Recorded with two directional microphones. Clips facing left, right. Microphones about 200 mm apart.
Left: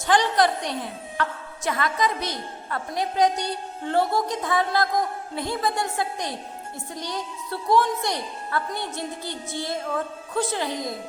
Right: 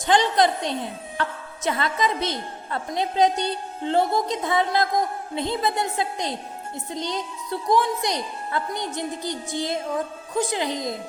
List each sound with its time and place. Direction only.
0.0 s a woman's voice: 20° right (ahead or behind)